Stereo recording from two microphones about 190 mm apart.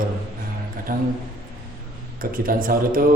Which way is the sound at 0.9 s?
50° right (ahead or behind).